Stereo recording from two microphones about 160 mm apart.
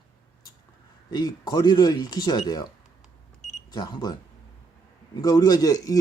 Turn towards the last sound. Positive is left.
turn(degrees=20)  # may be behind; listen again after turning